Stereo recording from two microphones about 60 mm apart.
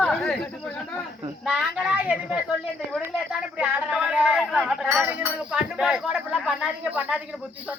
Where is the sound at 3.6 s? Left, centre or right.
Right.